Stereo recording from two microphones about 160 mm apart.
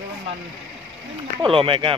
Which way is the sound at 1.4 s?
35° right (ahead or behind).